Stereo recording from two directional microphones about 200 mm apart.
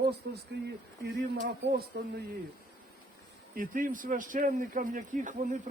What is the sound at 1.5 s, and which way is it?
Speech, 50° right (ahead or behind).